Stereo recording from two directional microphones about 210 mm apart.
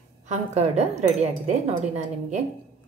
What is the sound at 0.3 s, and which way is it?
A woman's voice, 30° right (ahead or behind).